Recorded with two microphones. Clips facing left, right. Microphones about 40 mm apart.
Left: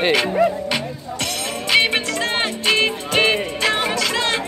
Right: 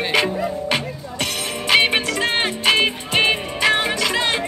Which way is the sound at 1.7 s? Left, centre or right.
Centre.